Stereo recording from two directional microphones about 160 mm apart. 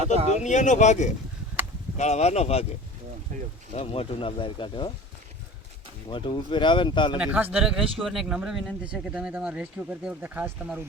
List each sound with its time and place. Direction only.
0.0 s speech: 40° right (ahead or behind)
0.4 s speech: 50° left (ahead or behind)
3.3 s speech: 55° right (ahead or behind)
3.8 s speech: 35° left (ahead or behind)
6.1 s speech: 30° left (ahead or behind)
7.2 s speech: 5° right (ahead or behind)